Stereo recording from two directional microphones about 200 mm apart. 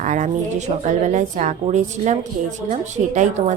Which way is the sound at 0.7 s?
40° right (ahead or behind).